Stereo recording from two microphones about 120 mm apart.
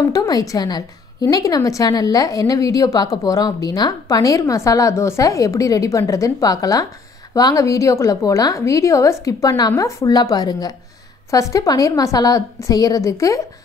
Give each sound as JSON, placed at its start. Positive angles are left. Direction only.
{"t": 0.0, "sound": "a woman's voice", "side_deg": 30}